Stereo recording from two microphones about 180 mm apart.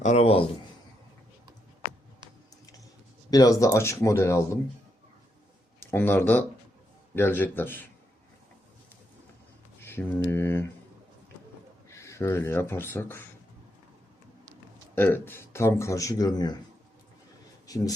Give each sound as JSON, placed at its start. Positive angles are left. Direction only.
{"t": 0.0, "sound": "speech", "side_deg": 40}
{"t": 3.2, "sound": "speech", "side_deg": 20}
{"t": 5.8, "sound": "speech", "side_deg": 15}
{"t": 9.8, "sound": "a sound", "side_deg": 10}
{"t": 10.2, "sound": "speech", "side_deg": 15}
{"t": 11.9, "sound": "speech", "side_deg": 15}
{"t": 14.9, "sound": "speech", "side_deg": 10}